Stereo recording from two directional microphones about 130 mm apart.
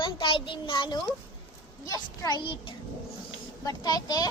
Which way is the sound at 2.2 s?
35° left (ahead or behind).